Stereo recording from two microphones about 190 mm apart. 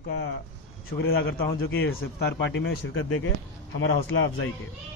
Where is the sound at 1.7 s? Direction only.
90° left.